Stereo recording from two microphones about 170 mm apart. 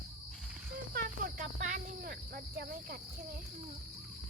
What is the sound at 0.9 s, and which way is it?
Cricket, 55° right (ahead or behind).